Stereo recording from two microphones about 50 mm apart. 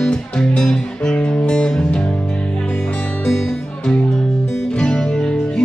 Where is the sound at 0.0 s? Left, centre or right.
Centre.